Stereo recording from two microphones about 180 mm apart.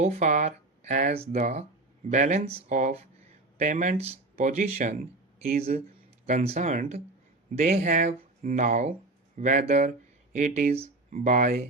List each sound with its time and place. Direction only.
0.0 s speech: 40° right (ahead or behind)